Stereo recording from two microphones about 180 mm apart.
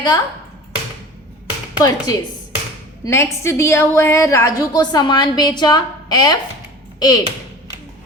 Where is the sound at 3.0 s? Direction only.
15° left (ahead or behind).